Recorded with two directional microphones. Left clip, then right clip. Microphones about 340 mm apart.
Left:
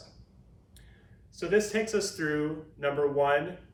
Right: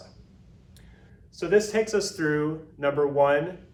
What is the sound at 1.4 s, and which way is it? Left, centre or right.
Speech, centre.